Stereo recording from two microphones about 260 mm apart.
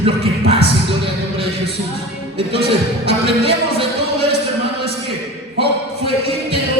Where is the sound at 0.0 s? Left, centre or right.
Right.